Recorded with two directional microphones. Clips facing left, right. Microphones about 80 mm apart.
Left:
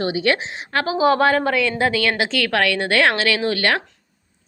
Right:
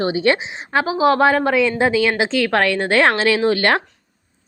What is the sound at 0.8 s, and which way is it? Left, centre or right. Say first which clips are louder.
Speech: right 1 dB; centre.